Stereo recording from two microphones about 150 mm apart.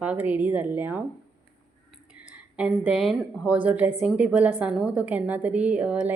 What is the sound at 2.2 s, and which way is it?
A woman's voice, 10° right (ahead or behind).